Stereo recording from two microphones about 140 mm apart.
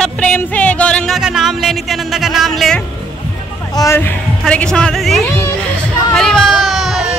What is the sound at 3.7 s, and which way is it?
Music, 25° left (ahead or behind).